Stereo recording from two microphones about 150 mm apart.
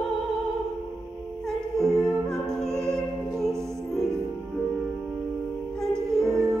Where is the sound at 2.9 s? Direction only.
Centre (ahead or behind).